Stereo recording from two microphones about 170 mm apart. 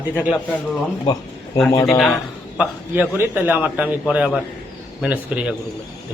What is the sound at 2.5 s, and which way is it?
A man's voice, 10° right (ahead or behind).